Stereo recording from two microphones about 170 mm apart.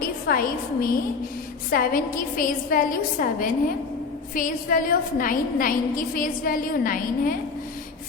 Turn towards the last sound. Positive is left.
turn(degrees=55)  # may be behind; listen again after turning